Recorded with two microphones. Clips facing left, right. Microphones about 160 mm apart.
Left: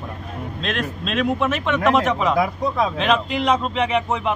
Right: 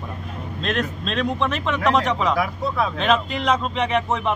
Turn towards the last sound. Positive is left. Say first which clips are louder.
# left 1 dB
turn(degrees=0)  # may be behind; listen again after turning